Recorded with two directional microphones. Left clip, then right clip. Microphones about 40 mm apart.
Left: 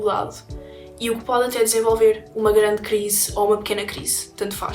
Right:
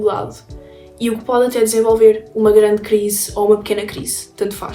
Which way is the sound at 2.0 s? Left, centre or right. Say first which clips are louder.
Right 6 dB; left.